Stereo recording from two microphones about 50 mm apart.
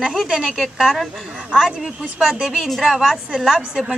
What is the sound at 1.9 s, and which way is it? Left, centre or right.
Speech, right.